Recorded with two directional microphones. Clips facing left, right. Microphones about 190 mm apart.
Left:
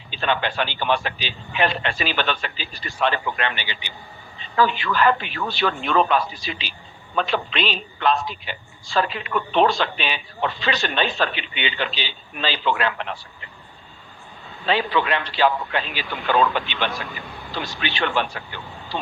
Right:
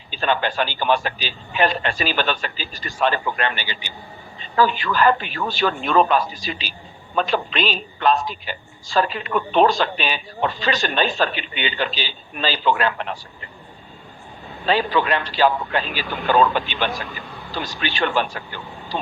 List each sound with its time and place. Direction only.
0.1 s a woman's voice: 40° right (ahead or behind)
14.7 s a woman's voice: 40° right (ahead or behind)